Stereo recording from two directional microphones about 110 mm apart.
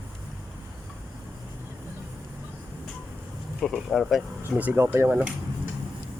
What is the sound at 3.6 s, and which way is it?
Speech, 5° left (ahead or behind).